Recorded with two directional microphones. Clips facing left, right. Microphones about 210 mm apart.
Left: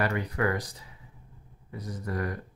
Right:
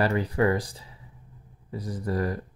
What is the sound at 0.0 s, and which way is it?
Speech, 30° right (ahead or behind).